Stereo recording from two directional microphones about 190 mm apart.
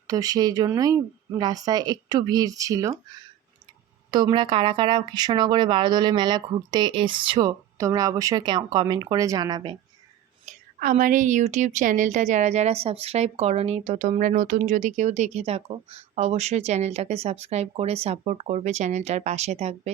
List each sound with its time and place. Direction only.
0.1 s speech: 20° right (ahead or behind)
10.4 s a woman's voice: 45° right (ahead or behind)